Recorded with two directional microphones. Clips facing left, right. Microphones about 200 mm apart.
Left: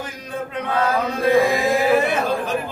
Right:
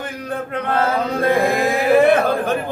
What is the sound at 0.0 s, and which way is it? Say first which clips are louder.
Chant: right 3 dB; 60° right (ahead or behind).